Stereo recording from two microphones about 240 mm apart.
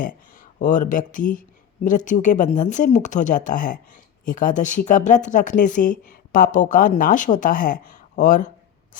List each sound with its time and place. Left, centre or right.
0.0 s speech: left